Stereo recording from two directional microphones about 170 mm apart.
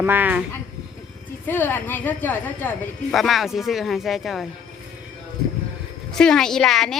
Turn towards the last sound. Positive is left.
turn(degrees=0)  # may be behind; listen again after turning